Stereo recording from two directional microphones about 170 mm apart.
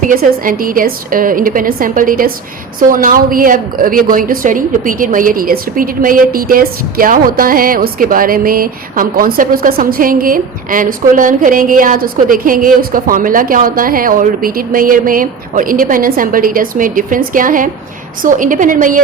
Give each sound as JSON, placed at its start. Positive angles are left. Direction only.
{"t": 0.1, "sound": "a woman's voice", "side_deg": -55}